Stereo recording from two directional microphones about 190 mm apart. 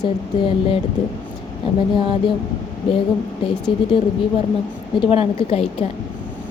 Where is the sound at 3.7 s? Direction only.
30° left (ahead or behind).